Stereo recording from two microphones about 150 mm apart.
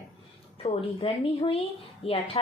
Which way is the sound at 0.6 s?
40° left (ahead or behind).